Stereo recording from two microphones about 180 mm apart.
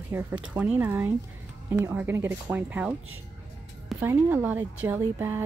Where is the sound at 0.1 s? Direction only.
10° right (ahead or behind).